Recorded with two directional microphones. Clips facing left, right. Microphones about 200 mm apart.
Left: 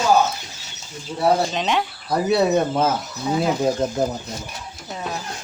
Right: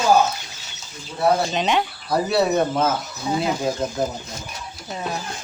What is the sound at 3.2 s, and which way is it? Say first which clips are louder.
Speech: left 2 dB; centre (ahead or behind).